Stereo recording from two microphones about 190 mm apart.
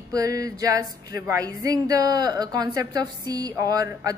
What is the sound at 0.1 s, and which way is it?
A woman's voice, 20° right (ahead or behind).